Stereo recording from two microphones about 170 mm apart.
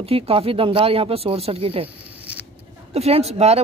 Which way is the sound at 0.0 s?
35° right (ahead or behind).